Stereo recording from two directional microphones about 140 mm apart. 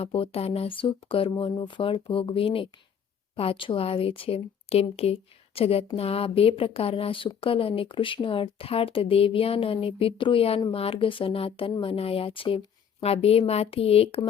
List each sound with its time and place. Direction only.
0.0 s a woman's voice: 45° left (ahead or behind)